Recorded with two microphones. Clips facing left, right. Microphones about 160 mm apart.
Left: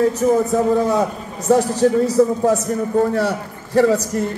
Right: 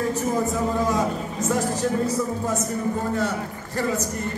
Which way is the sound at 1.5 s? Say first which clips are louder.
Left 10 dB; 70° left (ahead or behind).